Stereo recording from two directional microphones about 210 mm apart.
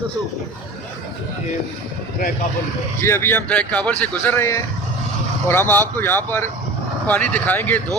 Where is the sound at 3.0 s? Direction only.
10° left (ahead or behind).